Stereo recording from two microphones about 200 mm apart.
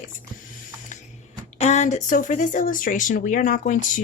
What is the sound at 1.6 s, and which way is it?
Speech, 35° left (ahead or behind).